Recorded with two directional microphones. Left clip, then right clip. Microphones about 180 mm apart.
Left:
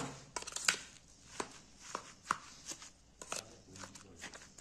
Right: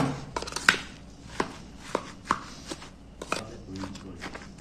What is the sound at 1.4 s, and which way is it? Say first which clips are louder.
Chopping: right 13 dB; 10° left (ahead or behind).